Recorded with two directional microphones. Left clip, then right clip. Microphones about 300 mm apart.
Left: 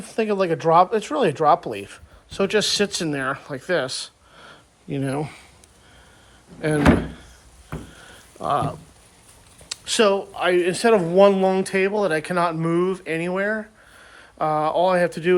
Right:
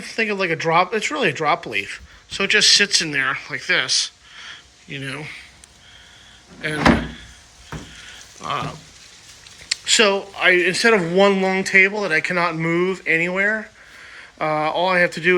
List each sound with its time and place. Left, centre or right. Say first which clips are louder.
0.0 s speech: even; centre
8.4 s speech: left 3 dB; centre